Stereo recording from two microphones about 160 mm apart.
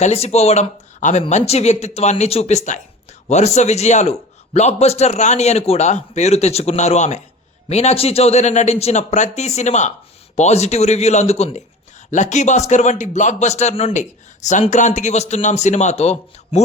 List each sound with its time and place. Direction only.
0.0 s speech: 40° left (ahead or behind)